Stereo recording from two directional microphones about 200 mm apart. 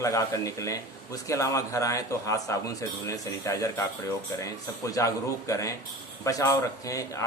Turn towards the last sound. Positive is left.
turn(degrees=15)  # may be behind; listen again after turning